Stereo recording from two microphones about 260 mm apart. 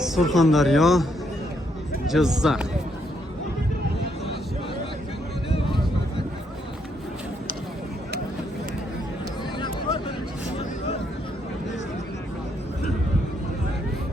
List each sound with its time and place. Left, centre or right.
0.0 s speech: centre
2.0 s speech: centre